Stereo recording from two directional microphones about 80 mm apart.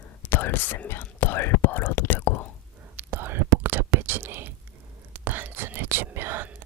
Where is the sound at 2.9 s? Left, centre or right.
Right.